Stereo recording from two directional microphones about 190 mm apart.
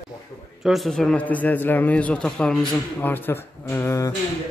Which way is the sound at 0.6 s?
Centre (ahead or behind).